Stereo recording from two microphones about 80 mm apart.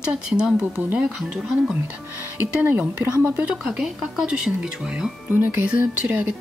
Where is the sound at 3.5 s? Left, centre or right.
Centre.